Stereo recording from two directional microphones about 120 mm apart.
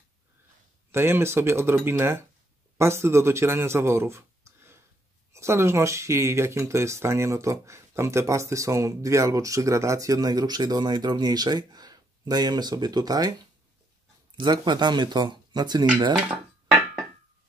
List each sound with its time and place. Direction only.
0.9 s speech: 20° right (ahead or behind)
14.3 s speech: 40° right (ahead or behind)